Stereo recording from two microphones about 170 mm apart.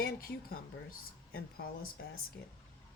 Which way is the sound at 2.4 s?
90° left.